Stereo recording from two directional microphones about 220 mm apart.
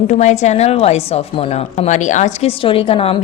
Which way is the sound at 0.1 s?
30° left (ahead or behind).